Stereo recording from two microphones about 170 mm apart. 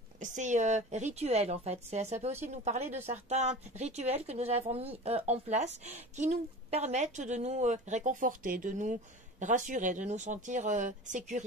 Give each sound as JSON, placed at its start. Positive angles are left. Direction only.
{"t": 0.2, "sound": "a woman's voice", "side_deg": -45}